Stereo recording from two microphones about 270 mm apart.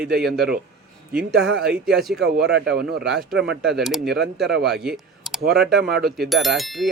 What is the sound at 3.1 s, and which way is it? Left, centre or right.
Speech, centre.